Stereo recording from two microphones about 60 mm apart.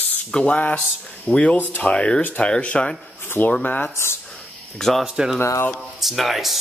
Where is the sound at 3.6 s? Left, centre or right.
Left.